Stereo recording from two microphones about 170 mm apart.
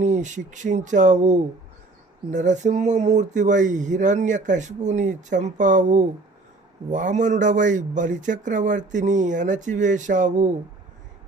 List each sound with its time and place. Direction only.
0.0 s speech: 45° right (ahead or behind)